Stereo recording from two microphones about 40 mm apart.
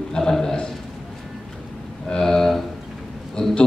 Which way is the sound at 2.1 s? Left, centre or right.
Centre.